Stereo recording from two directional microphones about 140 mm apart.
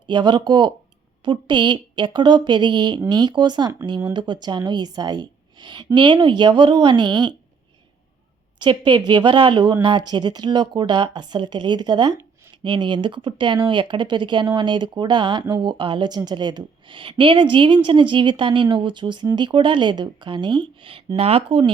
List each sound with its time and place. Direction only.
0.1 s speech: 35° right (ahead or behind)
8.6 s speech: 35° right (ahead or behind)